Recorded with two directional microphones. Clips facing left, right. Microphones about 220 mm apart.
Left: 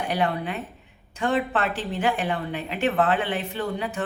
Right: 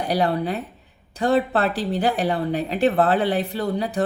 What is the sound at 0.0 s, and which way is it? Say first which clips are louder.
A woman's voice: right 4 dB; 35° right (ahead or behind).